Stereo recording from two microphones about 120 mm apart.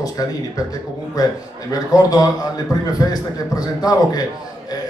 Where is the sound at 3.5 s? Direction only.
30° left (ahead or behind).